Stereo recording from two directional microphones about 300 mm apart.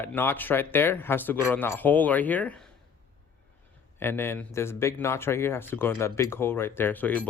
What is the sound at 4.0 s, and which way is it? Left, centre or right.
Speech, centre.